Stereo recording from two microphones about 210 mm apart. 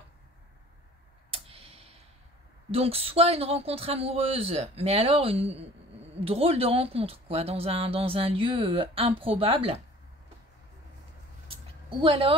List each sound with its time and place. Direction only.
1.3 s tick-tock: 25° right (ahead or behind)
2.7 s speech: 30° right (ahead or behind)
11.4 s a sound: 25° right (ahead or behind)